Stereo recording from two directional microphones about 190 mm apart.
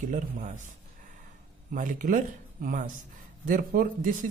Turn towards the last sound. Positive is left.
turn(degrees=-45)  # may be behind; listen again after turning